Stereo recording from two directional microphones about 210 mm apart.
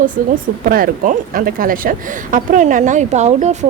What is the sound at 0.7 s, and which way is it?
Speech, 45° right (ahead or behind).